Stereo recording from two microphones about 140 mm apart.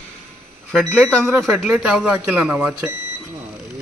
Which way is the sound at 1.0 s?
Centre (ahead or behind).